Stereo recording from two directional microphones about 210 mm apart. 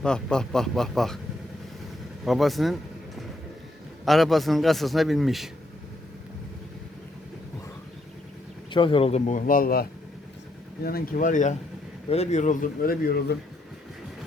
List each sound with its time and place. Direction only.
0.0 s a man's voice: 5° left (ahead or behind)
2.2 s a man's voice: centre (ahead or behind)
4.0 s a man's voice: centre (ahead or behind)
8.7 s speech: 25° left (ahead or behind); by 9.8 s 45° left (ahead or behind)
10.8 s speech: 45° left (ahead or behind)